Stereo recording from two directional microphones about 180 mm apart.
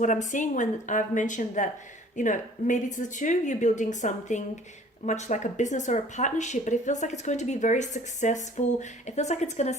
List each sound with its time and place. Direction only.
0.0 s speech: 45° left (ahead or behind)